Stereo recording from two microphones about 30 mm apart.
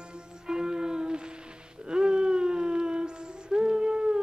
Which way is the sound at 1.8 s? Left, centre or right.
Right.